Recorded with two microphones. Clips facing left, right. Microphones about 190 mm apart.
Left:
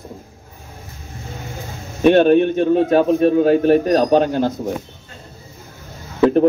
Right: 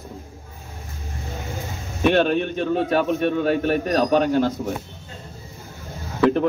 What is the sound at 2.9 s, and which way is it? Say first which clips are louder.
A man's voice: left 7 dB; 30° left (ahead or behind).